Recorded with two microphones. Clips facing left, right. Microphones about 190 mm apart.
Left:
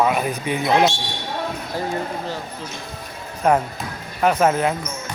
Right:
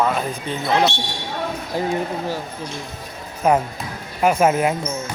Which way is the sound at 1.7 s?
15° right (ahead or behind).